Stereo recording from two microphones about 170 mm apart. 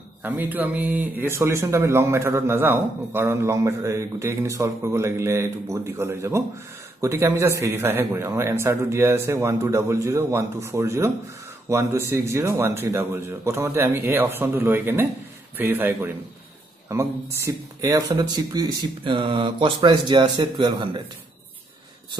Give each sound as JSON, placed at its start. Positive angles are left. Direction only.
{"t": 0.2, "sound": "speech", "side_deg": -10}